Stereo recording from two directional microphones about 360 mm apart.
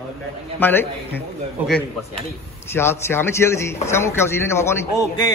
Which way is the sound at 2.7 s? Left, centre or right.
Centre.